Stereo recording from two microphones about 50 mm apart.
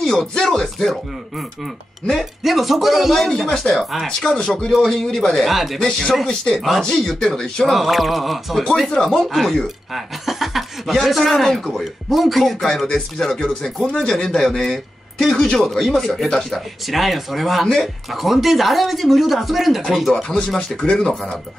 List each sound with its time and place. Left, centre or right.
0.3 s speech: centre
2.4 s speech: centre
3.2 s speech: centre
5.5 s speech: centre
5.8 s speech: centre
16.8 s speech: centre
20.3 s speech: centre